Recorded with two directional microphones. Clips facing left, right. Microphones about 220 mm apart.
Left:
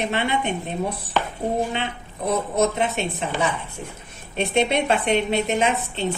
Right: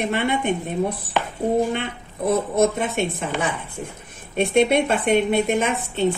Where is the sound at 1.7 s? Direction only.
50° right (ahead or behind).